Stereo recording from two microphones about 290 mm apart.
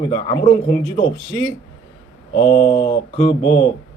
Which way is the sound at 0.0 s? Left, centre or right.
Centre.